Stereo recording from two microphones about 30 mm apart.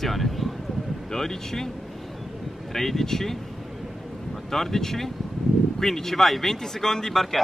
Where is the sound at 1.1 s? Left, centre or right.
Centre.